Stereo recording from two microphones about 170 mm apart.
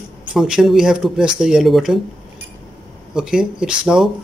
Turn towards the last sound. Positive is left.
turn(degrees=-5)  # may be behind; listen again after turning